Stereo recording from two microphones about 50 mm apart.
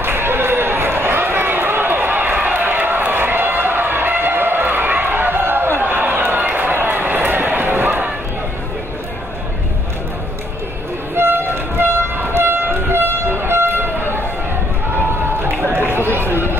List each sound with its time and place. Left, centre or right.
0.0 s run: right
11.1 s train: right
15.6 s run: right